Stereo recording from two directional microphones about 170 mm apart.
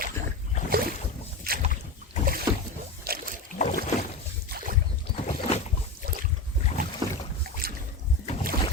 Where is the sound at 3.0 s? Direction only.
60° right (ahead or behind).